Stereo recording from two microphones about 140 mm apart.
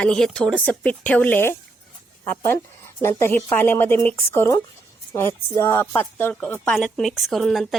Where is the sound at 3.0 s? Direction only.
20° left (ahead or behind).